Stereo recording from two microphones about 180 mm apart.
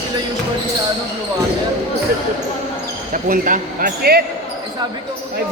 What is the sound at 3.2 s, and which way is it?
Speech, 50° right (ahead or behind).